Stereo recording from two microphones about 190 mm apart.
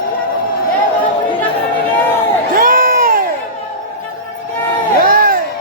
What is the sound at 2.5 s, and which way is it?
Crowd, 50° right (ahead or behind).